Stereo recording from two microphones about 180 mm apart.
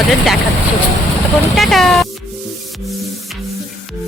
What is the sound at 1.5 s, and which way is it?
Speech, centre (ahead or behind).